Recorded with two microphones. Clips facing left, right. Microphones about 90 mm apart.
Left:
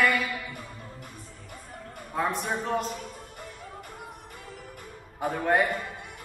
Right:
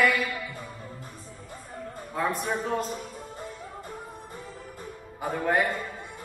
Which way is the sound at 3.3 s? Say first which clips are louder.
Right 3 dB; 25° right (ahead or behind).